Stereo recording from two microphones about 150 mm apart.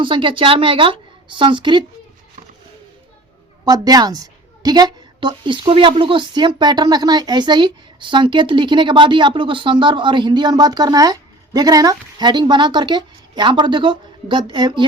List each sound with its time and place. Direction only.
0.0 s a woman's voice: 35° right (ahead or behind)
3.7 s a woman's voice: 25° right (ahead or behind)